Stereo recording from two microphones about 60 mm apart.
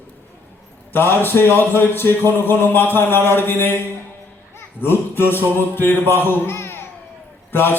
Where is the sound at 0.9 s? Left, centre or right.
Left.